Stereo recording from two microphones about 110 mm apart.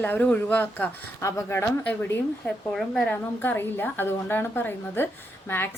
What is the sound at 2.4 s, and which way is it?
Speech, centre (ahead or behind).